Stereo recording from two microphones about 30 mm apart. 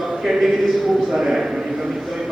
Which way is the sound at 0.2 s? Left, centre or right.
Centre.